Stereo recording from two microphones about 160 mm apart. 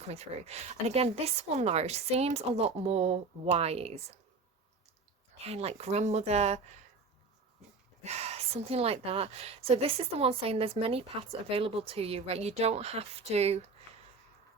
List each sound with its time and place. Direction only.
0.1 s a woman's voice: 40° right (ahead or behind)
5.4 s speech: 40° right (ahead or behind)
8.0 s a woman's voice: 40° right (ahead or behind)